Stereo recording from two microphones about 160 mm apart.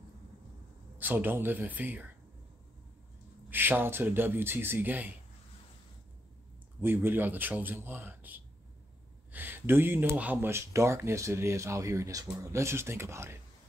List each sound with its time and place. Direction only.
0.9 s speech: 10° right (ahead or behind)
3.4 s speech: 10° right (ahead or behind)
6.8 s speech: 15° right (ahead or behind)